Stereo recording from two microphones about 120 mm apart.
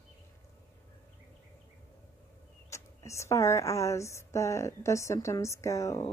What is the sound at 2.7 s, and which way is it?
A woman's voice, 25° left (ahead or behind).